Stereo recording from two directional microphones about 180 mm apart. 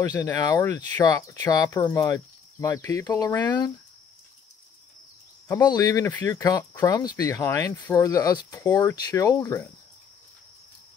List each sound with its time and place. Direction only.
0.0 s speech: 20° left (ahead or behind)
5.5 s speech: 20° left (ahead or behind)